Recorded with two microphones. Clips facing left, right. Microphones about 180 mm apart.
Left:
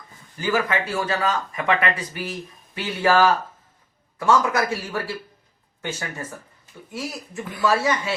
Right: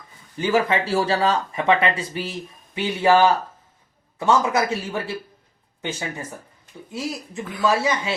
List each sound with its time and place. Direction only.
0.3 s speech: 25° right (ahead or behind)